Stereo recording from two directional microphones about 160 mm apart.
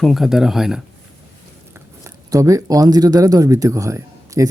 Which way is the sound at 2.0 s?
20° right (ahead or behind).